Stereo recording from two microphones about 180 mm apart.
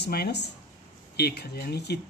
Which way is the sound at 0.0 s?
65° left (ahead or behind).